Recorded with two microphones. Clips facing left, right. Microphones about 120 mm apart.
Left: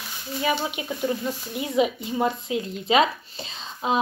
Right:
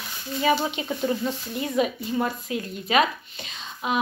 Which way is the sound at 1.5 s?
15° left (ahead or behind).